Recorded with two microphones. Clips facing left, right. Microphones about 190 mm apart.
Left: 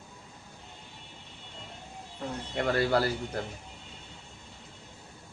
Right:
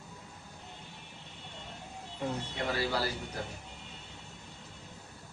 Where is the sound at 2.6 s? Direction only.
55° left (ahead or behind).